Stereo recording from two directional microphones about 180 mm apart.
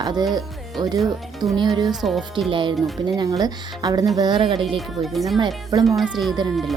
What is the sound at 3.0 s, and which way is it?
Speech, 25° right (ahead or behind).